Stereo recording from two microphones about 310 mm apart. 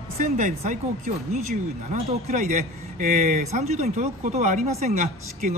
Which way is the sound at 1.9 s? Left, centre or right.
Right.